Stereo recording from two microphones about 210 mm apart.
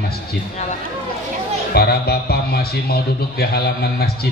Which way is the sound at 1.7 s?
50° left (ahead or behind).